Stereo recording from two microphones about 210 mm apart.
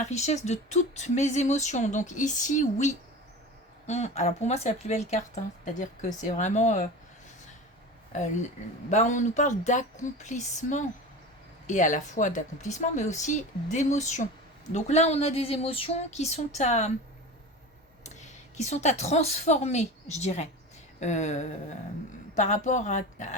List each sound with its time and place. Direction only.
0.0 s speech: 35° left (ahead or behind)
8.1 s speech: 35° left (ahead or behind)
18.0 s a woman's voice: 35° left (ahead or behind)